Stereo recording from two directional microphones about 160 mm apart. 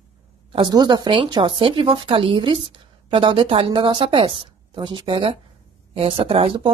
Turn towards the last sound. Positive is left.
turn(degrees=-35)  # may be behind; listen again after turning